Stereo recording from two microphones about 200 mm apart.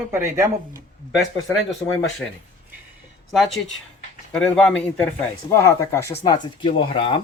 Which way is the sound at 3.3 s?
Centre (ahead or behind).